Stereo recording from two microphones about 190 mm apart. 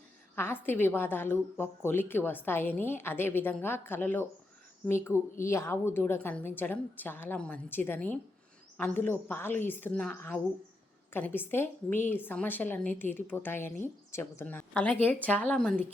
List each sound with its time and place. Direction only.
0.3 s a woman's voice: 10° left (ahead or behind)